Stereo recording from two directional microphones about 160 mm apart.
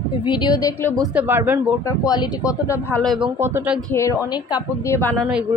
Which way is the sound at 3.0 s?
Centre (ahead or behind).